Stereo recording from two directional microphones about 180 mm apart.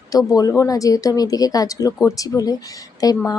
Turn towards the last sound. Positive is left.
turn(degrees=20)  # may be behind; listen again after turning